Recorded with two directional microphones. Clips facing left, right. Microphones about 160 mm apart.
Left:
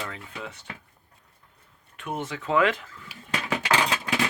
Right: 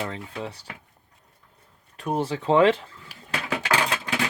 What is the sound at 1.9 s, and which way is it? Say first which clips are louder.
Speech: right 6 dB; 35° right (ahead or behind).